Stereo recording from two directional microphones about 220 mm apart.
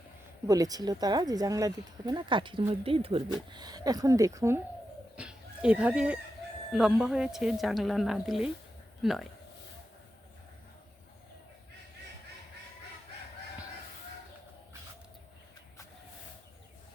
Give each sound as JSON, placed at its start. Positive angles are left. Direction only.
{"t": 0.4, "sound": "a woman's voice", "side_deg": -15}